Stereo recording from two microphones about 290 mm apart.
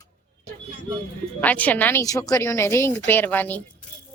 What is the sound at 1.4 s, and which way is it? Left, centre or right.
Speech, centre.